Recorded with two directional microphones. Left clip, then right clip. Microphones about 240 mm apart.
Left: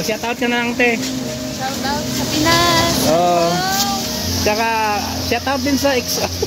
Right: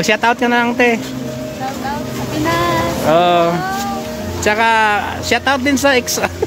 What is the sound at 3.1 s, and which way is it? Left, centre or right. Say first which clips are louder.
Speech: right 5 dB; centre.